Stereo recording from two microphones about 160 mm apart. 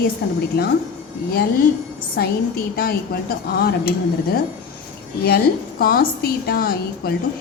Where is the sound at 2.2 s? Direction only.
75° left (ahead or behind).